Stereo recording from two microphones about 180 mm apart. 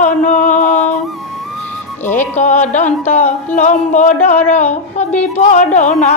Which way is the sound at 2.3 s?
40° left (ahead or behind).